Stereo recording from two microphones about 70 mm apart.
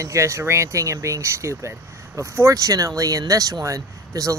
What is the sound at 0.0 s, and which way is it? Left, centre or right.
Speech, right.